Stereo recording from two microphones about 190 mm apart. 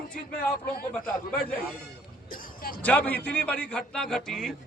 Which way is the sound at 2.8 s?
10° left (ahead or behind).